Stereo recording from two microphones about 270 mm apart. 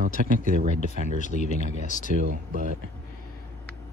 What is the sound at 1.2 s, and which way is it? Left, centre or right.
Speech, left.